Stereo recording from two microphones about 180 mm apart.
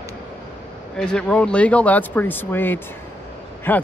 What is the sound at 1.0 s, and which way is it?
Speech, 5° left (ahead or behind).